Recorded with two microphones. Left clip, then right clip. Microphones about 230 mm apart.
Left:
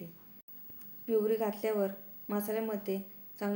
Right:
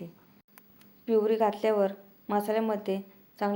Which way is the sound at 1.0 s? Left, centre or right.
Centre.